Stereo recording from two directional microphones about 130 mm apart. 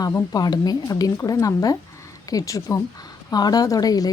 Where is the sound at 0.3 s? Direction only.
30° left (ahead or behind).